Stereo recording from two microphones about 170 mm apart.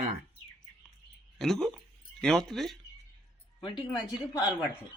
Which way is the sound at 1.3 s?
Centre (ahead or behind).